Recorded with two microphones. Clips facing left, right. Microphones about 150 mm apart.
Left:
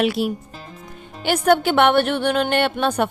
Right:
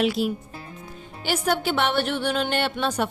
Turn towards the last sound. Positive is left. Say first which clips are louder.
# left 5 dB
turn(degrees=60)  # may be behind; listen again after turning